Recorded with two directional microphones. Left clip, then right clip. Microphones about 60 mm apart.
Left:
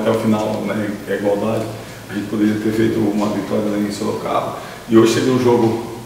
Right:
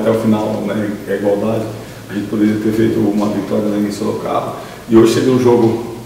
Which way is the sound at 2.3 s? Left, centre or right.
Centre.